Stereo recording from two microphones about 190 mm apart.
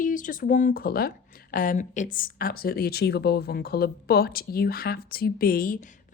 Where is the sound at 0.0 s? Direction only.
45° left (ahead or behind).